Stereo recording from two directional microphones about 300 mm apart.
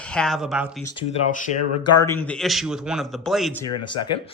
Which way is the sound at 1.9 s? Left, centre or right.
Centre.